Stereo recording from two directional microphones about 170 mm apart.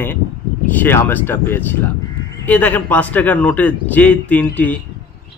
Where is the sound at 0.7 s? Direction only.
10° left (ahead or behind).